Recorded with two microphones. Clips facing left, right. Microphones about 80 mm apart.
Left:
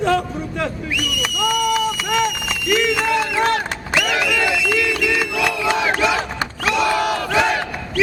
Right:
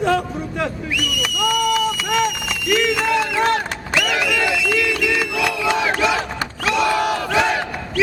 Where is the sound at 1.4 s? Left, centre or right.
Centre.